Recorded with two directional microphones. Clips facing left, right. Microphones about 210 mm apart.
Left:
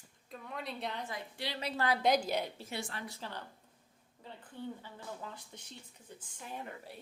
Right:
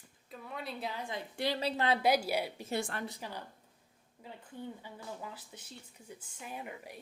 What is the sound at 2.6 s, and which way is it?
Speech, 50° right (ahead or behind).